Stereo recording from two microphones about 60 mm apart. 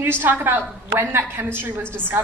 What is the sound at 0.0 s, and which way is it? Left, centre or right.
A man's voice, right.